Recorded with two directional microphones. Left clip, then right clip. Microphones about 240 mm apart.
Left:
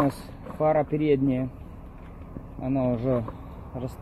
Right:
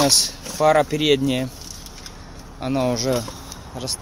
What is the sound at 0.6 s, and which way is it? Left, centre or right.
Speech, right.